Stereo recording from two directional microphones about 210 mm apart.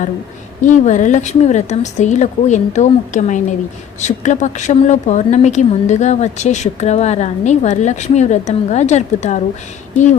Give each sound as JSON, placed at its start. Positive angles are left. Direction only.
{"t": 0.6, "sound": "speech", "side_deg": 35}